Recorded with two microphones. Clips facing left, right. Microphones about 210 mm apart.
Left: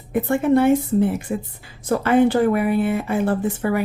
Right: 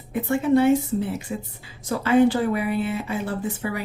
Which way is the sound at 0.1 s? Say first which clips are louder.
Left 3 dB; 55° left (ahead or behind).